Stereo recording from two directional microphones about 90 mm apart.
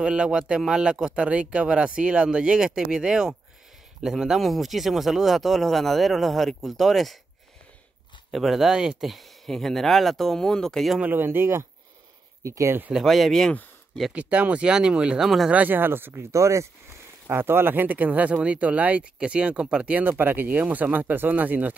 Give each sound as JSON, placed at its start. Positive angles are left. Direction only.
{"t": 0.0, "sound": "speech", "side_deg": -10}
{"t": 8.3, "sound": "speech", "side_deg": 0}
{"t": 11.0, "sound": "speech", "side_deg": -20}
{"t": 12.9, "sound": "speech", "side_deg": 0}
{"t": 14.1, "sound": "speech", "side_deg": -15}
{"t": 15.5, "sound": "speech", "side_deg": -20}